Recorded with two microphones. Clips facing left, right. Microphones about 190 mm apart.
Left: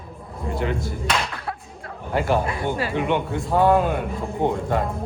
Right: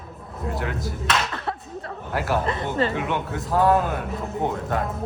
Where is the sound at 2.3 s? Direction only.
10° left (ahead or behind).